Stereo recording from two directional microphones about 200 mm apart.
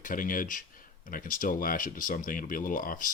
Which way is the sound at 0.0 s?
45° left (ahead or behind).